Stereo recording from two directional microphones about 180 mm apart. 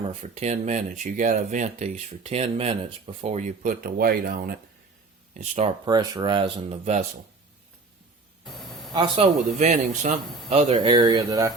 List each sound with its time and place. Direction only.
0.1 s speech: 35° right (ahead or behind); by 4.5 s 55° right (ahead or behind)
5.3 s speech: 40° right (ahead or behind)
5.8 s speech: 20° right (ahead or behind)
9.2 s speech: 30° right (ahead or behind)
9.6 s speech: 40° right (ahead or behind); by 11.5 s 20° right (ahead or behind)